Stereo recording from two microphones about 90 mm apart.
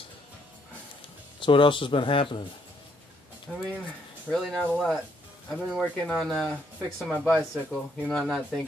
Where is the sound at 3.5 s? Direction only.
5° right (ahead or behind).